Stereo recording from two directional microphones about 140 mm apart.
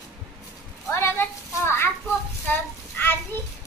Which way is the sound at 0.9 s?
15° left (ahead or behind).